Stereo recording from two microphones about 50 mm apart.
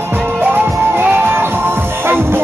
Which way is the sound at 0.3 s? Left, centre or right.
Right.